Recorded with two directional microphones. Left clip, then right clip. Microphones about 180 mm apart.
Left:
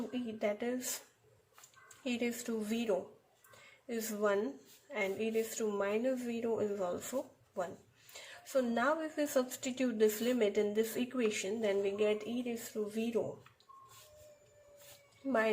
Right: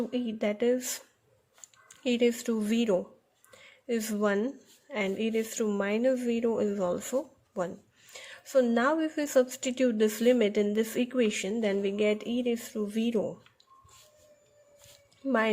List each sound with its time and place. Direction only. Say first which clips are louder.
0.1 s a woman's voice: right 5 dB; 45° right (ahead or behind)
2.0 s a woman's voice: right 11 dB; 45° right (ahead or behind)